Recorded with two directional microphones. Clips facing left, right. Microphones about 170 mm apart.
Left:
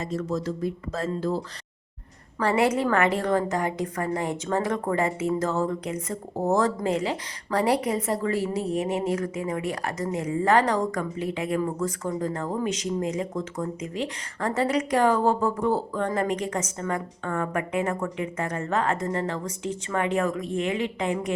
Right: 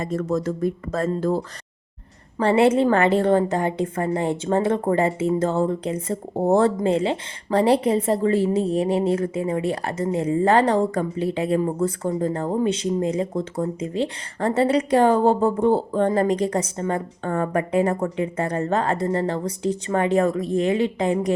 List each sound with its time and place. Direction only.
0.0 s speech: 50° right (ahead or behind)
2.4 s a woman's voice: 30° right (ahead or behind)